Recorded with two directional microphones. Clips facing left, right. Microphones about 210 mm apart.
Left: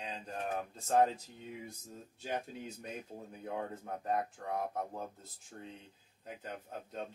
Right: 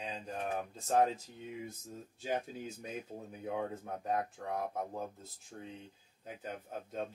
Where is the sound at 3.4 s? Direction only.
Centre (ahead or behind).